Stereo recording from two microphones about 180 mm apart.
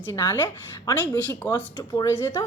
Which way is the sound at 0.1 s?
15° left (ahead or behind).